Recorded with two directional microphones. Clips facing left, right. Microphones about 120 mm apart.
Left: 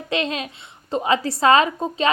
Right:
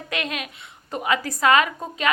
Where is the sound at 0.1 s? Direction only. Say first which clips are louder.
Left 5 dB; 30° left (ahead or behind).